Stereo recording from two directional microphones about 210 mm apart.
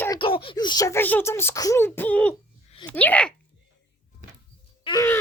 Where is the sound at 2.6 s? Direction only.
25° left (ahead or behind).